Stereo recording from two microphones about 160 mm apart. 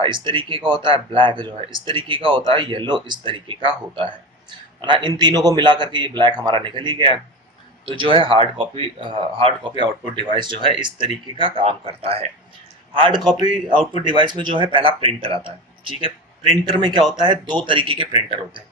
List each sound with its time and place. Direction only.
0.0 s a man's voice: 30° right (ahead or behind)